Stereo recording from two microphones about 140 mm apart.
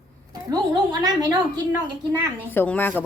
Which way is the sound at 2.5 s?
15° left (ahead or behind).